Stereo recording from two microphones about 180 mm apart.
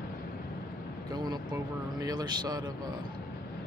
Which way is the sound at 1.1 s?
25° right (ahead or behind).